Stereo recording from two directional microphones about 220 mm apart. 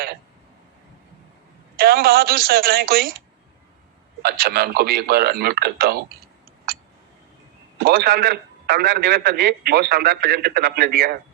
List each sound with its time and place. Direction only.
1.7 s a man's voice: 45° right (ahead or behind)
4.2 s a man's voice: 45° right (ahead or behind)
7.8 s a man's voice: 45° right (ahead or behind)